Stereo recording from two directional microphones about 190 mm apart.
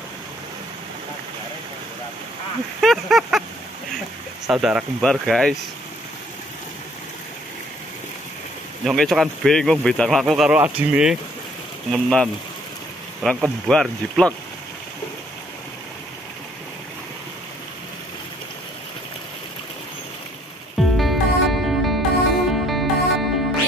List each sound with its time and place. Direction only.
2.8 s speech: centre (ahead or behind)
4.5 s speech: 5° right (ahead or behind)
8.8 s speech: centre (ahead or behind)
20.7 s music: centre (ahead or behind)